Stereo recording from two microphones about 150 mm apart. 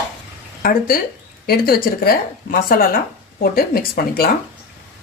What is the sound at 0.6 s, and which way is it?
Speech, 75° left (ahead or behind).